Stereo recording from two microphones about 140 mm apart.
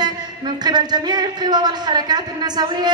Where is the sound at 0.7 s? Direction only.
30° right (ahead or behind).